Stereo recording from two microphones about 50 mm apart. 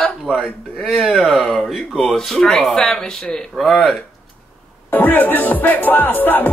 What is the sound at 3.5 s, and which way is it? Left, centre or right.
Speech, centre.